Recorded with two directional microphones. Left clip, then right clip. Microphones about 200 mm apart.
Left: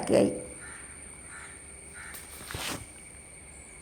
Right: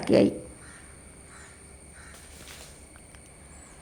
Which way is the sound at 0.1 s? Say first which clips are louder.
Right 3 dB; 30° right (ahead or behind).